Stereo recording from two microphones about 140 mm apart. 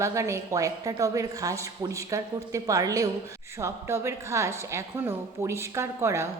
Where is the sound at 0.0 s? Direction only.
20° right (ahead or behind).